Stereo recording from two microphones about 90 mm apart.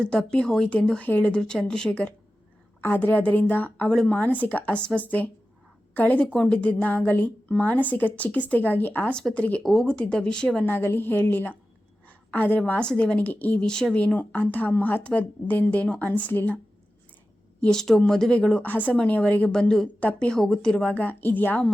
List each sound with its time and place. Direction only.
0.0 s a woman's voice: 10° left (ahead or behind)
10.7 s a woman's voice: 25° left (ahead or behind)
17.6 s a woman's voice: 5° left (ahead or behind)